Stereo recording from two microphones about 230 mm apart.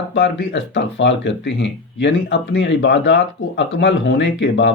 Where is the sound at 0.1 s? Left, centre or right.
Left.